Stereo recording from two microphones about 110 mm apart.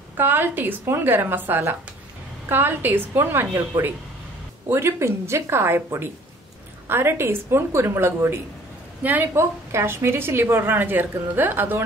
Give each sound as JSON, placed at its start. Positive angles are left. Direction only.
{"t": 0.2, "sound": "a woman's voice", "side_deg": -20}